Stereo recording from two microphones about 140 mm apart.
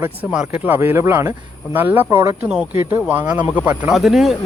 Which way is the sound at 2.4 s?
10° right (ahead or behind).